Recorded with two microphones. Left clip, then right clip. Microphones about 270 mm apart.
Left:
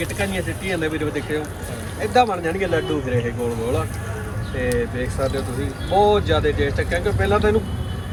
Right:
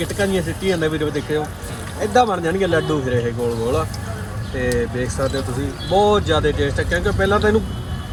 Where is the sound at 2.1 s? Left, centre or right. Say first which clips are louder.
Right 1 dB; right.